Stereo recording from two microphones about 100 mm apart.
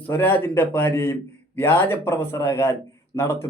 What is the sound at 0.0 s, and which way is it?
Speech, 20° left (ahead or behind).